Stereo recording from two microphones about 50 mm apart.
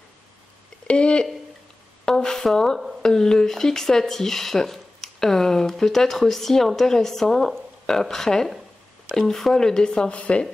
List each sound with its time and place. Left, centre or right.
0.8 s speech: left
2.0 s speech: centre